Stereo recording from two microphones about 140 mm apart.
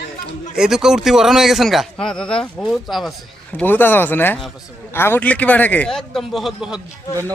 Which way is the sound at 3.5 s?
15° left (ahead or behind).